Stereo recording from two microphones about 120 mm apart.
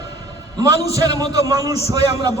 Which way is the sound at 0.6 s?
30° right (ahead or behind).